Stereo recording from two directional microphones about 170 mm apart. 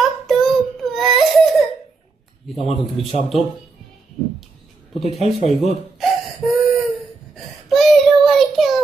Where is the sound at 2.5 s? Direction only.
Centre (ahead or behind).